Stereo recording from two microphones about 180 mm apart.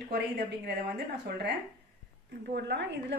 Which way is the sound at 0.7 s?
65° right (ahead or behind).